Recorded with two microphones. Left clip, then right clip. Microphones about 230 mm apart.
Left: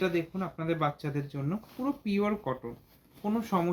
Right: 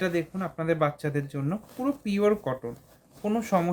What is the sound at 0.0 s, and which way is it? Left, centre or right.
Speech, right.